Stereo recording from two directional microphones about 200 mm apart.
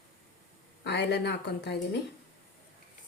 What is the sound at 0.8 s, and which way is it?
Speech, 55° left (ahead or behind).